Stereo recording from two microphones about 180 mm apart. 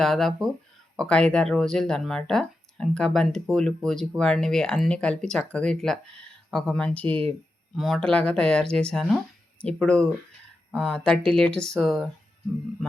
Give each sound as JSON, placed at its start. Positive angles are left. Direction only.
{"t": 0.0, "sound": "speech", "side_deg": 0}